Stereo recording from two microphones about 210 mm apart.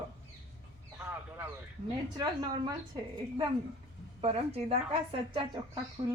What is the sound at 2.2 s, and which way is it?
Speech, 20° right (ahead or behind).